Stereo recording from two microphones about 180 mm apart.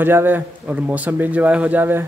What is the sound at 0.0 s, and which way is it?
A man's voice, 10° right (ahead or behind).